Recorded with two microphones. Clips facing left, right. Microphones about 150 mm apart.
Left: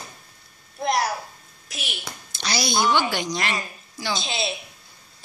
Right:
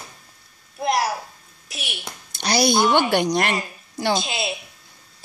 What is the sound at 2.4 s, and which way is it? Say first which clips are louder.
A woman's voice: right 5 dB; 55° right (ahead or behind).